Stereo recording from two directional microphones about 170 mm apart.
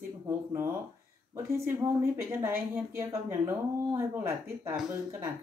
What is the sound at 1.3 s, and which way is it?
A woman's voice, 15° right (ahead or behind).